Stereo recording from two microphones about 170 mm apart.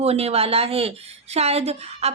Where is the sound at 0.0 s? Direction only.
35° right (ahead or behind).